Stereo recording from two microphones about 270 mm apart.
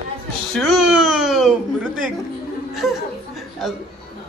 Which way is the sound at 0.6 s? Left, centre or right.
Centre.